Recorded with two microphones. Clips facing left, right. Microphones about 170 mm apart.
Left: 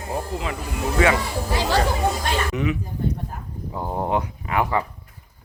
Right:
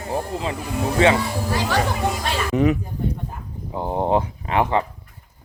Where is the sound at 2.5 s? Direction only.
40° right (ahead or behind).